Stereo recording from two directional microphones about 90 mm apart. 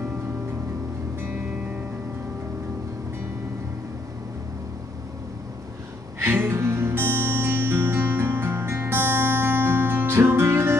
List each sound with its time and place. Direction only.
6.1 s music: 25° right (ahead or behind)